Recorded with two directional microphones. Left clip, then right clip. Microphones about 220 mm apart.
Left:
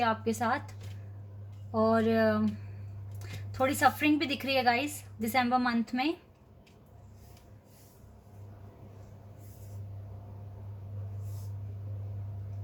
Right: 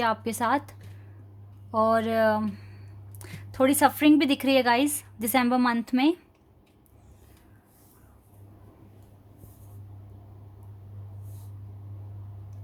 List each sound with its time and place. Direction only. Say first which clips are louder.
0.0 s a woman's voice: right 3 dB; 50° right (ahead or behind)
1.7 s a woman's voice: right 4 dB; 50° right (ahead or behind)